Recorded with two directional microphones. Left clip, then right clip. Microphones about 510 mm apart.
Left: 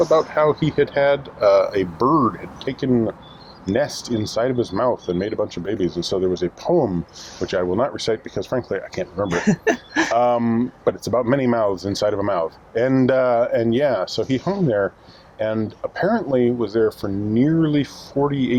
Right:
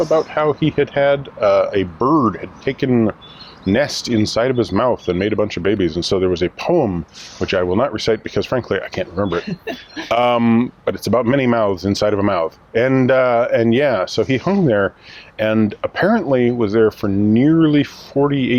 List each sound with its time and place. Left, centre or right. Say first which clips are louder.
0.1 s speech: right 1 dB; centre
9.4 s speech: left 7 dB; left
10.1 s speech: right 5 dB; right